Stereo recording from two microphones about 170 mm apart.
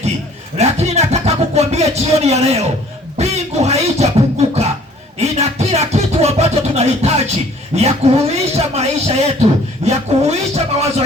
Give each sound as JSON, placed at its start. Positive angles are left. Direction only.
{"t": 0.5, "sound": "music", "side_deg": -40}
{"t": 3.2, "sound": "scratching", "side_deg": -40}
{"t": 5.2, "sound": "music", "side_deg": -40}
{"t": 7.8, "sound": "speech", "side_deg": -40}